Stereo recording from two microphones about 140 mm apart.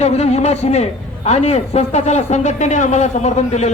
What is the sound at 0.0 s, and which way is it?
Speech, 50° left (ahead or behind).